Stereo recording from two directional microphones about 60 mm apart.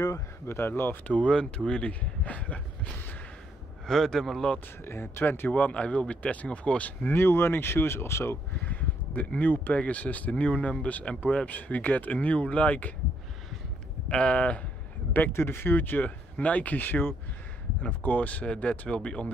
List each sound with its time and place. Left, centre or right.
0.5 s speech: left
1.1 s speech: centre
3.8 s speech: centre
4.8 s speech: left; by 7.1 s centre
7.1 s speech: left
8.6 s speech: left
14.0 s speech: left
15.3 s speech: left